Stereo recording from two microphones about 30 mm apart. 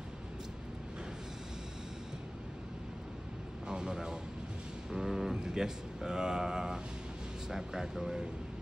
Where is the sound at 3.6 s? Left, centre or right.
Right.